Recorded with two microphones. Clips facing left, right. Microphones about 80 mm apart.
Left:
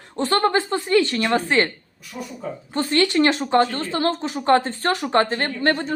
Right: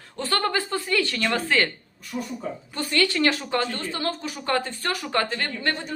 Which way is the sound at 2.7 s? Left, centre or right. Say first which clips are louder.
Left 5 dB; left.